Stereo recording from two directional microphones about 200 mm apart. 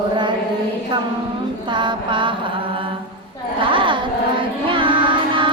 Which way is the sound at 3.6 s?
25° right (ahead or behind).